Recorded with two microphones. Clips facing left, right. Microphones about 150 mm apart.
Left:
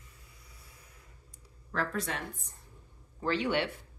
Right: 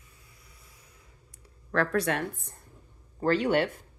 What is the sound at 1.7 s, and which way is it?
Speech, 70° right (ahead or behind).